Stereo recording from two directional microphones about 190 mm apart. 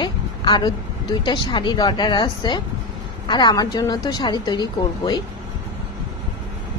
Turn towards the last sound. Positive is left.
turn(degrees=25)  # may be behind; listen again after turning